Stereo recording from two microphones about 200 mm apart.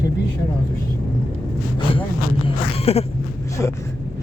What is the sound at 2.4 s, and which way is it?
Speech, 30° left (ahead or behind).